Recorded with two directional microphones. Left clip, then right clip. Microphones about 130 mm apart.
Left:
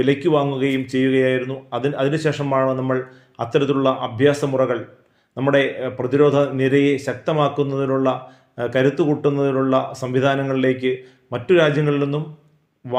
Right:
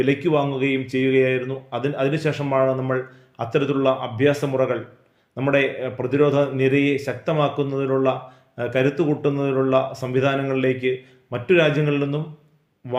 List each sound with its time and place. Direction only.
0.0 s speech: 25° left (ahead or behind)